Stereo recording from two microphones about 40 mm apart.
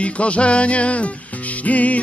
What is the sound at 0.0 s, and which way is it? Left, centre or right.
Music, left.